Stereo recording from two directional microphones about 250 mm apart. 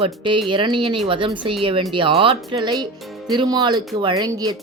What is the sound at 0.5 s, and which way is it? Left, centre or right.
Speech, centre.